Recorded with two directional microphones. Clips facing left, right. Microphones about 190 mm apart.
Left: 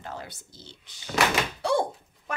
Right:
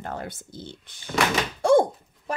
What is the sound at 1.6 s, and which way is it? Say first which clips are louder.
Thunk: right 9 dB; 45° right (ahead or behind).